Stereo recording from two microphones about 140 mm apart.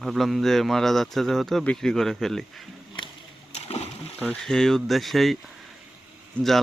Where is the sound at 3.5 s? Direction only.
50° left (ahead or behind).